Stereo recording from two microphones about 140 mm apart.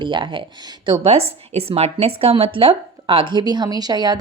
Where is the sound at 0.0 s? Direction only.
35° right (ahead or behind).